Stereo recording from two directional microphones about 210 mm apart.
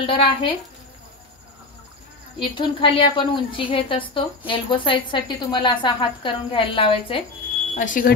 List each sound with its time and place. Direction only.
0.0 s a woman's voice: 25° left (ahead or behind)
2.3 s a woman's voice: 25° left (ahead or behind)
7.7 s speech: 40° left (ahead or behind)